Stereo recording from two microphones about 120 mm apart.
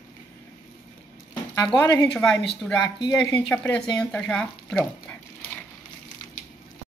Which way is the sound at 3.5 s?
10° left (ahead or behind).